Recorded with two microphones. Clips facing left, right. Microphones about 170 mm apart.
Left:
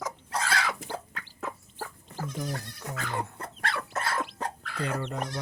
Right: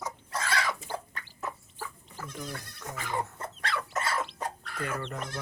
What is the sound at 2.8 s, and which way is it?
Goat, 65° left (ahead or behind).